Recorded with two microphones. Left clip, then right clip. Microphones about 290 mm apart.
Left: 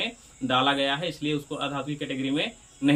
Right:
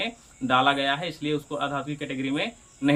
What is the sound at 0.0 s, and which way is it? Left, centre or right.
A man's voice, centre.